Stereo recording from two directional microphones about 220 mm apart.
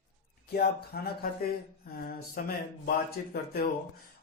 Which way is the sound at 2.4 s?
40° left (ahead or behind).